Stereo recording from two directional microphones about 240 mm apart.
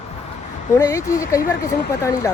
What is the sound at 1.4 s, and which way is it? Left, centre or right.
Speech, left.